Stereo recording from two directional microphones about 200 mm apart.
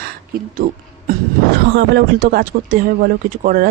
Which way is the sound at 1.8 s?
50° right (ahead or behind).